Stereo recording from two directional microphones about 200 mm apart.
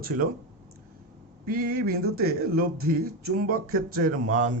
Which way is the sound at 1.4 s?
45° right (ahead or behind).